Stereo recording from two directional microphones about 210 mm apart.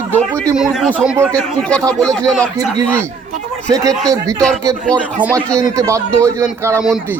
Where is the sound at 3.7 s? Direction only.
15° right (ahead or behind).